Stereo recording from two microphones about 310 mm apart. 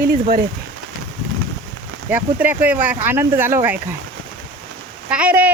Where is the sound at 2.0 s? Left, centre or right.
Centre.